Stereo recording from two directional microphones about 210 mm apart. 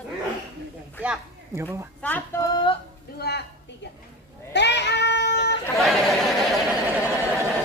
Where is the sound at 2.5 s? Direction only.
20° left (ahead or behind).